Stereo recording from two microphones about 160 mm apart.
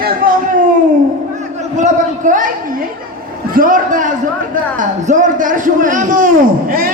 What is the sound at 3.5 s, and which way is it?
A man's voice, 60° right (ahead or behind).